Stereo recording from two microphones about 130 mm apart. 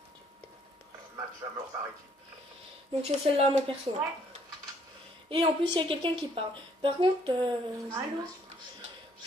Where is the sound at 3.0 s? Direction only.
55° right (ahead or behind).